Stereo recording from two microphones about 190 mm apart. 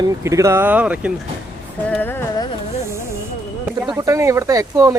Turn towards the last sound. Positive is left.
turn(degrees=-20)  # may be behind; listen again after turning